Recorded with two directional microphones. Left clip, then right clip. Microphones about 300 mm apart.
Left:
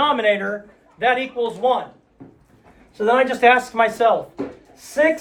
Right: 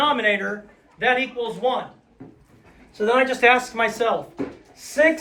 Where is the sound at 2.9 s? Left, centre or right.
Centre.